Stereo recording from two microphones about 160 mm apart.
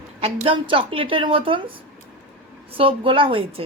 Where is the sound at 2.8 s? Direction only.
35° right (ahead or behind).